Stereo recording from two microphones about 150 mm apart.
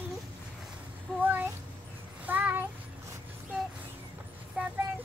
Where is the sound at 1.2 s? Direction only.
10° right (ahead or behind).